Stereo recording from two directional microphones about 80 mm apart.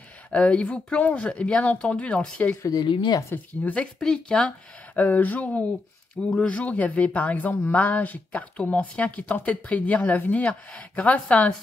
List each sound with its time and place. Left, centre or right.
0.3 s speech: centre
2.7 s speech: left
3.6 s speech: centre